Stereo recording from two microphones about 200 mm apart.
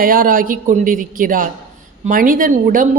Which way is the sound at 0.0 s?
45° right (ahead or behind).